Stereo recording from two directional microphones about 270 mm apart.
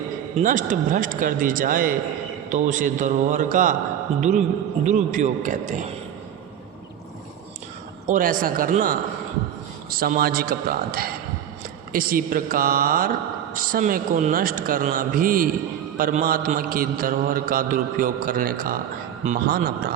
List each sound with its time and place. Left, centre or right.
0.3 s a man's voice: right
8.0 s mantra: right